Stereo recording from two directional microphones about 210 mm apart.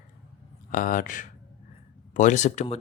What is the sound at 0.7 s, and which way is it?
Speech, 40° left (ahead or behind).